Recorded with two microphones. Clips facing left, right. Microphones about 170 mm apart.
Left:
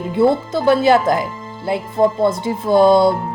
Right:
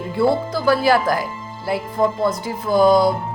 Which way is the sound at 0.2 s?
20° left (ahead or behind).